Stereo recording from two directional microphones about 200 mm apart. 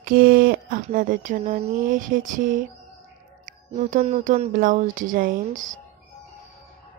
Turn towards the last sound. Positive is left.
turn(degrees=-40)  # may be behind; listen again after turning